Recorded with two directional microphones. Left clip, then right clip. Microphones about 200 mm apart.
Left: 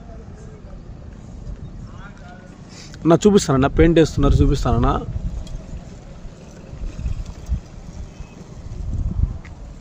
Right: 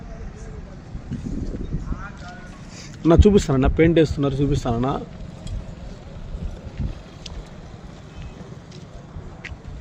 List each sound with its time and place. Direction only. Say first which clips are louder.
3.2 s speech: left 2 dB; 15° left (ahead or behind)